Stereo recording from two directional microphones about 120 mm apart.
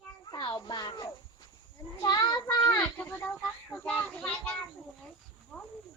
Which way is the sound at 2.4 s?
15° left (ahead or behind).